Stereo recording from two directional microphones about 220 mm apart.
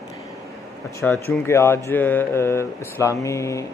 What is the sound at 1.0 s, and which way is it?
Speech, 10° left (ahead or behind).